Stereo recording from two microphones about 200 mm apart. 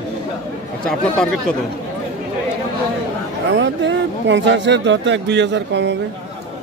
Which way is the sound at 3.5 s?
65° right (ahead or behind).